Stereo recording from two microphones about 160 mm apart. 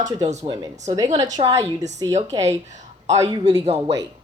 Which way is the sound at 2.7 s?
45° right (ahead or behind).